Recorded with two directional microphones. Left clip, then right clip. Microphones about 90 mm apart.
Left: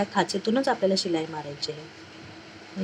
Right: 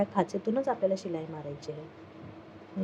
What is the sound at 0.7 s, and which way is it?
Speech, 25° left (ahead or behind).